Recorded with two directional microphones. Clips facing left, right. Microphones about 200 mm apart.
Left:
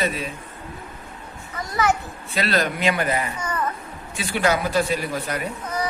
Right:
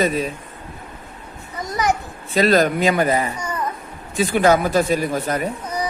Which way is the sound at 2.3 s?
45° right (ahead or behind).